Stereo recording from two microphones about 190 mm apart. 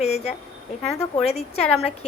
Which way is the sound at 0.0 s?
35° left (ahead or behind).